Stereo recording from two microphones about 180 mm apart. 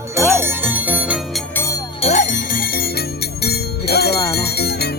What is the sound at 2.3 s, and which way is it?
Bell, 55° left (ahead or behind).